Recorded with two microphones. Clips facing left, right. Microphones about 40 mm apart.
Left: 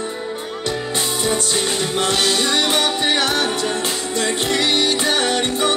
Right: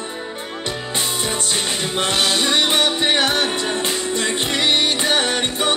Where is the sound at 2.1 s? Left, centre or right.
Centre.